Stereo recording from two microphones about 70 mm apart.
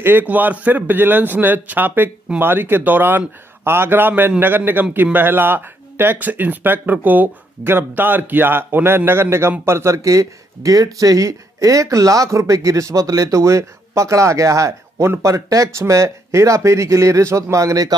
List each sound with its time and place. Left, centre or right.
0.0 s a man's voice: right